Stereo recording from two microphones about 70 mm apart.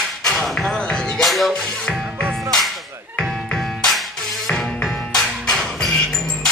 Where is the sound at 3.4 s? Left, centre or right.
Centre.